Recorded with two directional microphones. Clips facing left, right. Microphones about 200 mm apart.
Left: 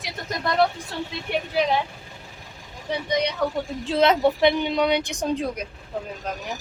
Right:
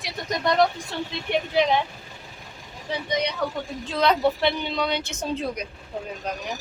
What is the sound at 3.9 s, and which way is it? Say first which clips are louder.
A woman's voice: left 2 dB; 20° left (ahead or behind).